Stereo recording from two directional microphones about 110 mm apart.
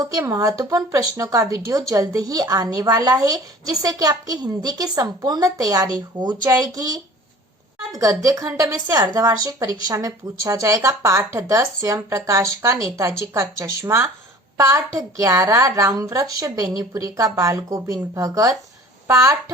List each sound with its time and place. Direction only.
0.0 s a woman's voice: 35° right (ahead or behind)